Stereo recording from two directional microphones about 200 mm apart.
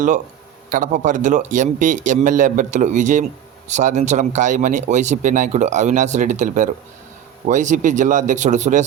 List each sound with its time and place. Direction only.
0.7 s speech: 40° right (ahead or behind)